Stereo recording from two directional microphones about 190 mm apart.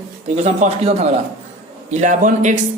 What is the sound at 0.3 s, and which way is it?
A man's voice, 35° right (ahead or behind).